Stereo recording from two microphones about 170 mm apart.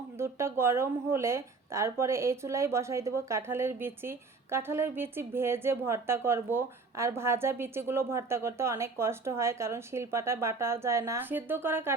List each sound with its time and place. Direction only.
0.2 s speech: 15° right (ahead or behind)